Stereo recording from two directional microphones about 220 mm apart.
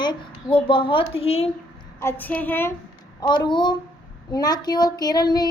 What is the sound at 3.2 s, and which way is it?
A woman's voice, 20° left (ahead or behind).